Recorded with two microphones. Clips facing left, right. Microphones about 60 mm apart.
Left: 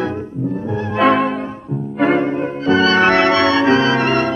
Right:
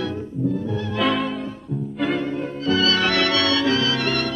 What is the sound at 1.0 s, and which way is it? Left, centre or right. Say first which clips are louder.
Music: left 8 dB; centre.